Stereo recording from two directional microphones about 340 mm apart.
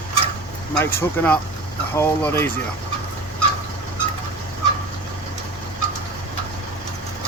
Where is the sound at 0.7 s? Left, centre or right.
Centre.